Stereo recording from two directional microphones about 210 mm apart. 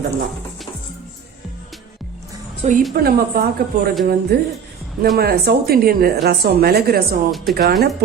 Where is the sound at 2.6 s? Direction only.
35° right (ahead or behind).